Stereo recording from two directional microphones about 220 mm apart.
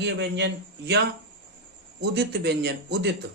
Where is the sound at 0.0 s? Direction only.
50° right (ahead or behind).